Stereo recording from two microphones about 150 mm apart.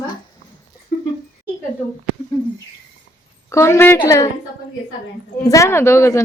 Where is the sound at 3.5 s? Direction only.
20° left (ahead or behind).